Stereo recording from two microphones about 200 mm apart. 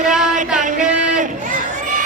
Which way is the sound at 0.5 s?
40° right (ahead or behind).